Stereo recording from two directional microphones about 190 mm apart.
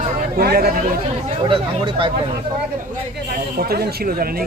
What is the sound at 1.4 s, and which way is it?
Speech, 25° right (ahead or behind).